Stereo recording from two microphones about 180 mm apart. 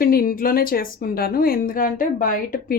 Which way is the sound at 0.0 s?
55° left (ahead or behind).